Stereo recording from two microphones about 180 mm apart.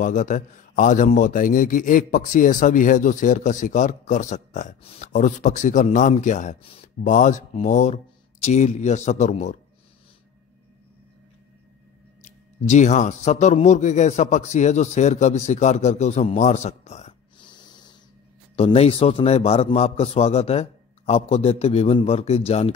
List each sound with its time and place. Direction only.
0.0 s a man's voice: 45° left (ahead or behind)
6.6 s speech: 30° left (ahead or behind)
7.0 s a man's voice: 45° left (ahead or behind)
12.2 s a man's voice: 40° left (ahead or behind)
17.4 s snort: 25° left (ahead or behind)
18.6 s a man's voice: 35° left (ahead or behind)